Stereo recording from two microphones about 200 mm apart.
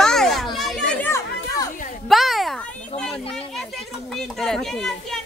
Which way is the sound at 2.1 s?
Centre (ahead or behind).